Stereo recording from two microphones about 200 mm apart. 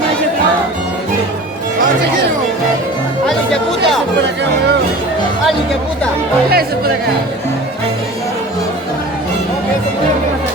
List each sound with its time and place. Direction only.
3.2 s music: centre (ahead or behind)
6.5 s music: 50° right (ahead or behind)